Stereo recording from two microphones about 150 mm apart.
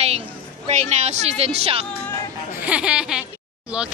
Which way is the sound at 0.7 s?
50° right (ahead or behind).